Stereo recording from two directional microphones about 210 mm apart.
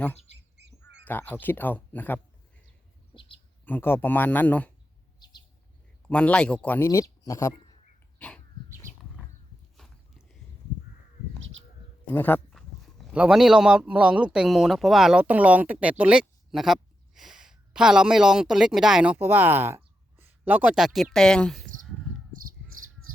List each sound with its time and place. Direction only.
1.0 s speech: 10° left (ahead or behind)
3.2 s a sound: 25° left (ahead or behind)
3.7 s speech: 10° left (ahead or behind)
5.2 s bird: 20° left (ahead or behind)
6.1 s speech: 5° left (ahead or behind)
9.7 s a sound: centre (ahead or behind)
12.0 s speech: 10° left (ahead or behind)
22.7 s cricket: 80° right